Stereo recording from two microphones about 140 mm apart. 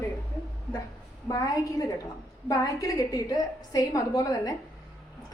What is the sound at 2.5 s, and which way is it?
A woman's voice, 25° left (ahead or behind).